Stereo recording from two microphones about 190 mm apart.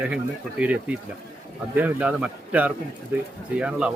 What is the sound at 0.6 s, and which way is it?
Speech, 5° right (ahead or behind).